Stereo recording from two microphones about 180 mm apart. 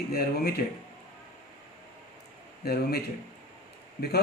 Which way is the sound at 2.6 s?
60° left (ahead or behind).